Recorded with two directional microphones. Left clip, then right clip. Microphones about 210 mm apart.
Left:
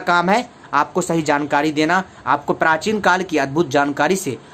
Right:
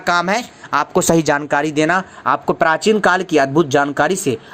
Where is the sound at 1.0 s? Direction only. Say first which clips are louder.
Right 4 dB; 40° right (ahead or behind).